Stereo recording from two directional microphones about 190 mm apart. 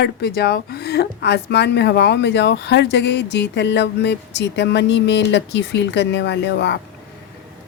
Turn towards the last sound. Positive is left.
turn(degrees=65)  # may be behind; listen again after turning